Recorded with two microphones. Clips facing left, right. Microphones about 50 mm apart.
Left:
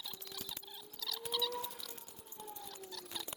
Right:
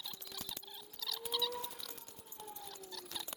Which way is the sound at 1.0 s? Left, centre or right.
Centre.